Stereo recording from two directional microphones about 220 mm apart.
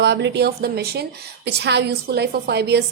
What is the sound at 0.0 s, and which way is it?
A woman's voice, 50° right (ahead or behind).